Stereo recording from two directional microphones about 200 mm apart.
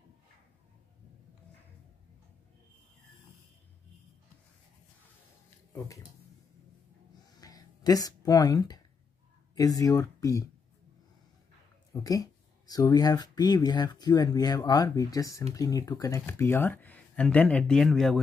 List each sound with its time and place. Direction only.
7.3 s a sound: 20° left (ahead or behind)
9.6 s speech: 15° left (ahead or behind)
11.9 s speech: 20° left (ahead or behind); by 18.2 s centre (ahead or behind)